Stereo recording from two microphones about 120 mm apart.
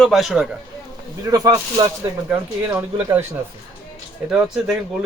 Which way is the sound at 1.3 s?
30° right (ahead or behind).